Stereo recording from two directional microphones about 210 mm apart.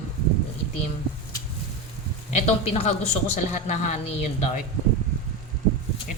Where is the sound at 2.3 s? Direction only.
30° left (ahead or behind).